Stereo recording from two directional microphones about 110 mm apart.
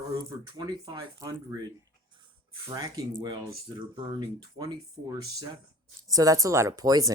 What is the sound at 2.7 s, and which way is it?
Speech, 35° right (ahead or behind).